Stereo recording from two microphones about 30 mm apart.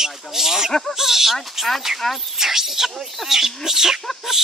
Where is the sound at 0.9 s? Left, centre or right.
Centre.